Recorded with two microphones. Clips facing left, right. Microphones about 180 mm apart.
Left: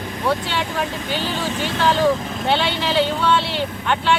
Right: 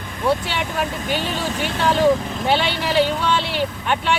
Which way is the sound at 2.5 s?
10° right (ahead or behind).